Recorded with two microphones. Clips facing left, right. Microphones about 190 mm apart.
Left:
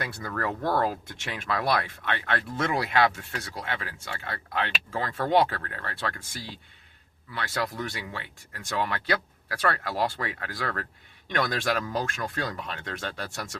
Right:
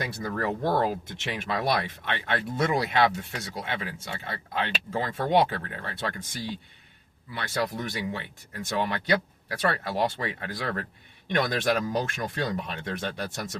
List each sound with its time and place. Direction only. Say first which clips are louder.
0.0 s speech: right 2 dB; 20° right (ahead or behind)
7.3 s speech: right 1 dB; 20° right (ahead or behind)